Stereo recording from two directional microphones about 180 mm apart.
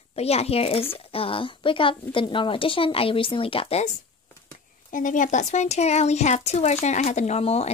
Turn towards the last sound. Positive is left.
turn(degrees=35)  # may be behind; listen again after turning